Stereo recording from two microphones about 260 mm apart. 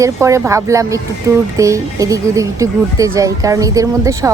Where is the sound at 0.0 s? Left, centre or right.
Centre.